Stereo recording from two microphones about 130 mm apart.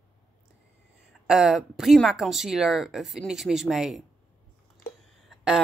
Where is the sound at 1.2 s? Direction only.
5° right (ahead or behind).